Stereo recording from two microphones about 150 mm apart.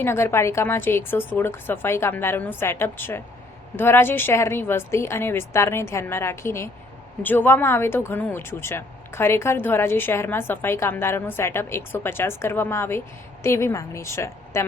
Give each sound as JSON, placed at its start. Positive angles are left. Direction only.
{"t": 0.0, "sound": "speech", "side_deg": 15}